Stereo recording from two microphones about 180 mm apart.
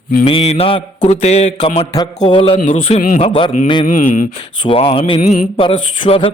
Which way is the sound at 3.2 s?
30° left (ahead or behind).